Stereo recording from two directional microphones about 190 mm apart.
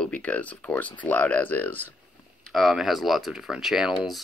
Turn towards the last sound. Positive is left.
turn(degrees=0)  # may be behind; listen again after turning